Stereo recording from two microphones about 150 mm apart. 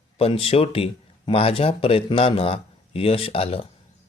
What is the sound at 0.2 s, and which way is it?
A man's voice, 40° left (ahead or behind).